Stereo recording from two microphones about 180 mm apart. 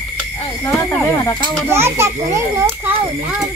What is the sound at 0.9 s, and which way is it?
Speech, 10° left (ahead or behind).